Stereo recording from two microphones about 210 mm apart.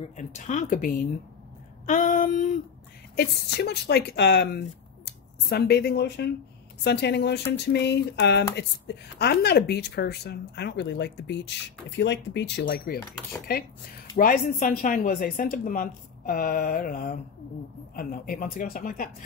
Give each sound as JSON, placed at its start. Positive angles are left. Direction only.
{"t": 0.1, "sound": "speech", "side_deg": 35}
{"t": 3.2, "sound": "speech", "side_deg": 50}
{"t": 14.1, "sound": "speech", "side_deg": 40}